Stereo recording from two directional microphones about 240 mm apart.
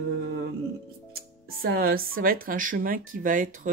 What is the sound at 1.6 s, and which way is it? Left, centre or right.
Speech, right.